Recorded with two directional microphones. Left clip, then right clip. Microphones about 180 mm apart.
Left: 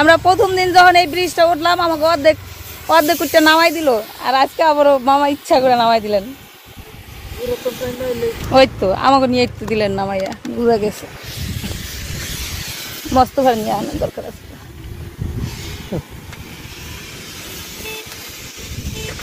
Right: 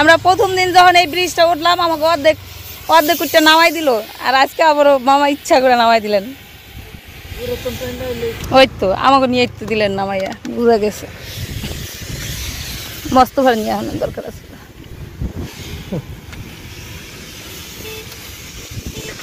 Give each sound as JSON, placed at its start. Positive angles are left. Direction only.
{"t": 0.0, "sound": "speech", "side_deg": 15}
{"t": 7.3, "sound": "speech", "side_deg": 85}
{"t": 8.5, "sound": "speech", "side_deg": 0}
{"t": 13.1, "sound": "speech", "side_deg": -25}
{"t": 15.9, "sound": "vehicle", "side_deg": -15}